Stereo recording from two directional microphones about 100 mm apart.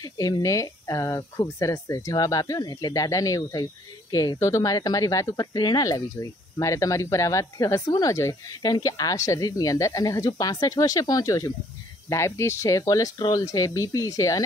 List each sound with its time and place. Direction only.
0.0 s speech: 35° left (ahead or behind)